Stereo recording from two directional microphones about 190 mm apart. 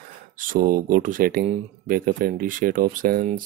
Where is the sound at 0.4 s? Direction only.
45° right (ahead or behind).